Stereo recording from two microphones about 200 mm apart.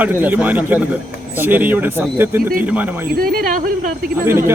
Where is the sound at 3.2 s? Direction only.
45° right (ahead or behind).